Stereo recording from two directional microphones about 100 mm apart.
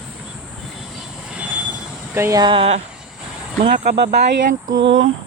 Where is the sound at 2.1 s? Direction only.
25° right (ahead or behind).